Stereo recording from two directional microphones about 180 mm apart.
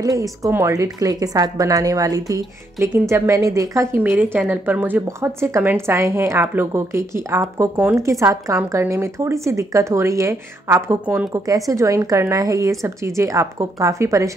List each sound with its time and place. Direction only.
0.0 s a woman's voice: 20° right (ahead or behind)